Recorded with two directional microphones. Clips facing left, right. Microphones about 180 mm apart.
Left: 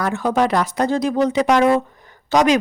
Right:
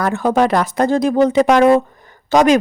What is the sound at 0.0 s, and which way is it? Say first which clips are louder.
A woman's voice: right 3 dB; 50° right (ahead or behind).